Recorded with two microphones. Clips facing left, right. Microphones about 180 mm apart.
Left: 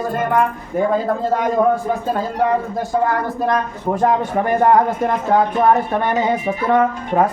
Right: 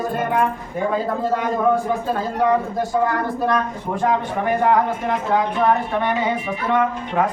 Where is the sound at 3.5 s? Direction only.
40° left (ahead or behind).